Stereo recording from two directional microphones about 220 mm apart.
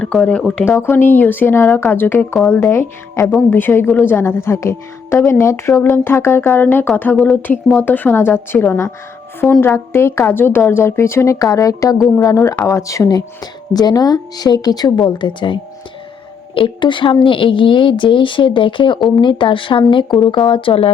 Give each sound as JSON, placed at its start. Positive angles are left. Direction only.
{"t": 0.0, "sound": "speech", "side_deg": 0}
{"t": 11.9, "sound": "speech", "side_deg": 0}
{"t": 12.2, "sound": "speech", "side_deg": 15}